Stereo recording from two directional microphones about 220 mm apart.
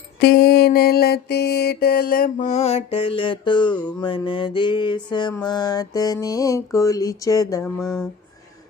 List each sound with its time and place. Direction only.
0.2 s mantra: 45° left (ahead or behind); by 7.6 s 15° left (ahead or behind)
7.8 s speech: centre (ahead or behind)